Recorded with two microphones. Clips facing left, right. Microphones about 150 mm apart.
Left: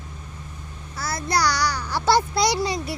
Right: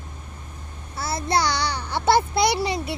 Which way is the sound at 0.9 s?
25° right (ahead or behind).